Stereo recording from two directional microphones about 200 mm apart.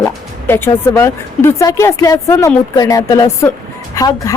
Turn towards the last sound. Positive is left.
turn(degrees=15)  # may be behind; listen again after turning